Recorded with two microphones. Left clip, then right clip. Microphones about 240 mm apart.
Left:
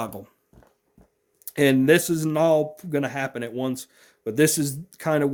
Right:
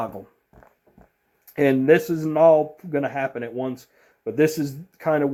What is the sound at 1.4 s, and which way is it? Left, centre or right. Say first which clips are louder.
Speech: even; left.